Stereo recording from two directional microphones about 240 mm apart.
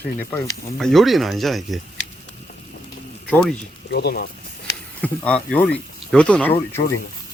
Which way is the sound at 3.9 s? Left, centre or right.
Left.